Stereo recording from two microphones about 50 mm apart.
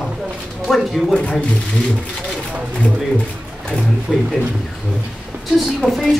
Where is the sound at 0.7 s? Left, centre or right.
Centre.